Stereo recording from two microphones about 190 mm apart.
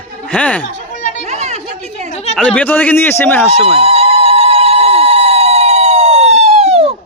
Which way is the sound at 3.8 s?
30° right (ahead or behind).